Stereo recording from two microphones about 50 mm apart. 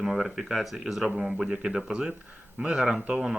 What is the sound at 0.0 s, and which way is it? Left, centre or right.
Speech, centre.